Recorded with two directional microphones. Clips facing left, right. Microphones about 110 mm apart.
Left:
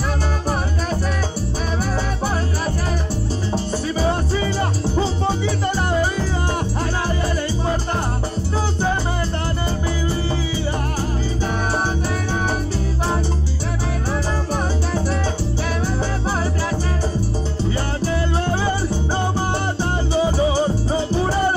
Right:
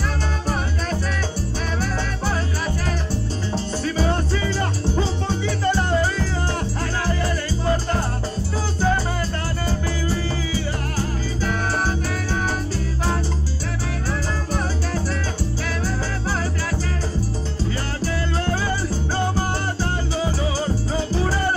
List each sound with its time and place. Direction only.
3.5 s music: 15° left (ahead or behind)
5.9 s music: 15° left (ahead or behind)
11.4 s music: 20° left (ahead or behind)
18.0 s music: 20° left (ahead or behind)
19.8 s music: 20° left (ahead or behind)